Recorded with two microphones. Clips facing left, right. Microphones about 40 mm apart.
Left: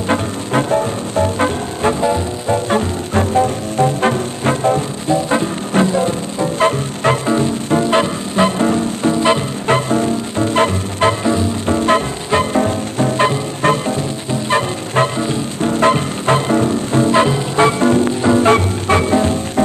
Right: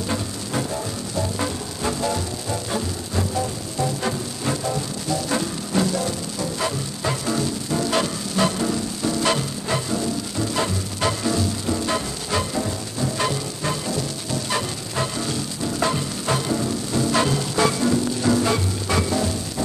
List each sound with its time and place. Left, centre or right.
0.1 s music: left
7.2 s music: left
9.7 s music: left